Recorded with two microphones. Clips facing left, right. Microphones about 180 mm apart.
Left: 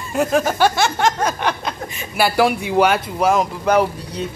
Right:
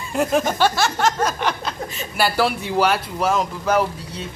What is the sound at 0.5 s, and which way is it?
Speech, 15° left (ahead or behind).